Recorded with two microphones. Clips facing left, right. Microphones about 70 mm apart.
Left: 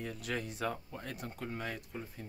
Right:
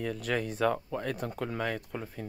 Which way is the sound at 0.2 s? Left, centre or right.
Right.